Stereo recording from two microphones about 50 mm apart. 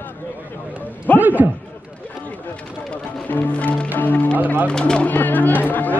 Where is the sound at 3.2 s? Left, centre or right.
Left.